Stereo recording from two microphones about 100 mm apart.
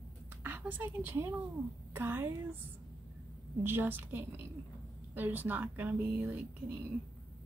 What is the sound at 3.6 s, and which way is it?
Speech, 20° right (ahead or behind).